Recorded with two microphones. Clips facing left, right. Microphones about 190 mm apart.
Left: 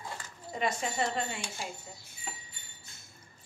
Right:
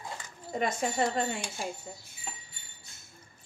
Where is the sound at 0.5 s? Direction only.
45° right (ahead or behind).